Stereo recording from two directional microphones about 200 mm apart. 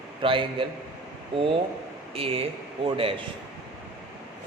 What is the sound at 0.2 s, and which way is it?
Speech, 25° right (ahead or behind).